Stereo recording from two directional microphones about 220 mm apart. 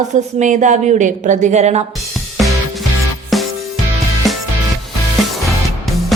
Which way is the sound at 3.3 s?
Centre (ahead or behind).